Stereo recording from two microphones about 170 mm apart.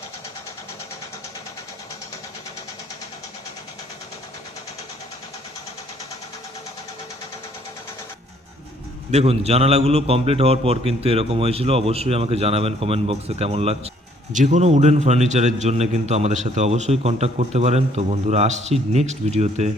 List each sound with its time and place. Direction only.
9.1 s a man's voice: 35° right (ahead or behind)